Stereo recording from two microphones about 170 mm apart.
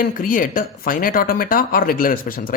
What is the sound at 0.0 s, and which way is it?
Speech, 55° left (ahead or behind).